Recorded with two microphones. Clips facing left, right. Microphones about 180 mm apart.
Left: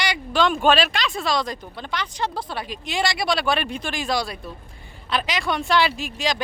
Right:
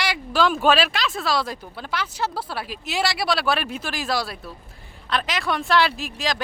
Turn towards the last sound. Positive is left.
turn(degrees=0)  # may be behind; listen again after turning